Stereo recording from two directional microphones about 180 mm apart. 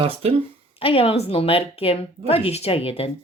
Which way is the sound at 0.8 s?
30° left (ahead or behind).